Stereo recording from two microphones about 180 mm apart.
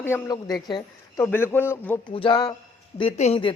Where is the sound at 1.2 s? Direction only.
10° left (ahead or behind).